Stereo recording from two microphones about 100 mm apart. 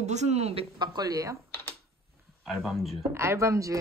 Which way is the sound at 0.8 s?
40° right (ahead or behind).